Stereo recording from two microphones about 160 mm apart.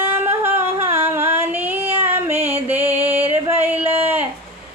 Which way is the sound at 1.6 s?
10° right (ahead or behind).